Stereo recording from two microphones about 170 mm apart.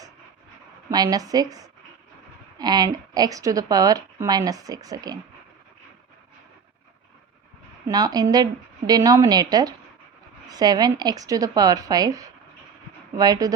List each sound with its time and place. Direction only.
0.9 s speech: 20° right (ahead or behind)
7.9 s speech: 20° right (ahead or behind)